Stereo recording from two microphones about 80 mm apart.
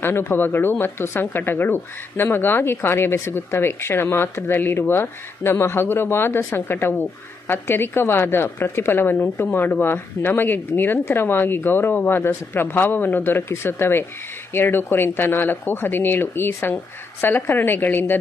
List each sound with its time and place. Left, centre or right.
0.0 s speech: left